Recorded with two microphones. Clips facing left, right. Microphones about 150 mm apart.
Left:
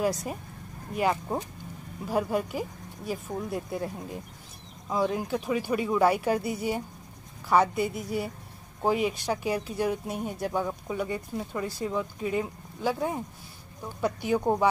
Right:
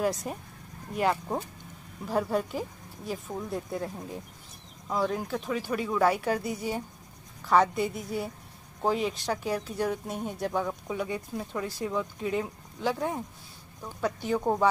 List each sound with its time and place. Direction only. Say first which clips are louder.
0.0 s speech: left 1 dB; 5° left (ahead or behind)